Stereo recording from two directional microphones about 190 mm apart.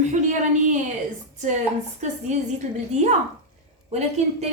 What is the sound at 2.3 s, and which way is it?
A woman's voice, 40° right (ahead or behind).